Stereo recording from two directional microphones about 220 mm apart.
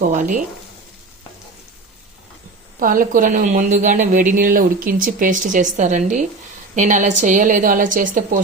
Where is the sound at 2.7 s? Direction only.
40° right (ahead or behind).